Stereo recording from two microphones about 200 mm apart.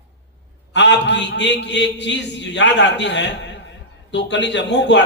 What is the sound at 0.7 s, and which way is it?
A man's voice, 60° left (ahead or behind).